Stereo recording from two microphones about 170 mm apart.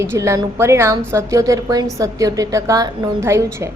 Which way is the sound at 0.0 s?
15° right (ahead or behind).